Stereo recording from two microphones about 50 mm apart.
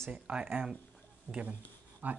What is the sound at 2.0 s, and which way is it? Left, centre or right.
Speech, right.